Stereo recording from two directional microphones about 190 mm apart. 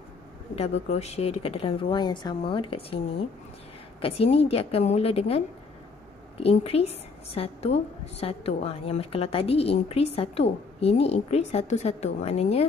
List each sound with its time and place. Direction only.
0.6 s a woman's voice: 35° left (ahead or behind)